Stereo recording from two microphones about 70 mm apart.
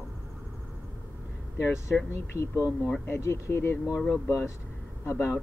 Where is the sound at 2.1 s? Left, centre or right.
Left.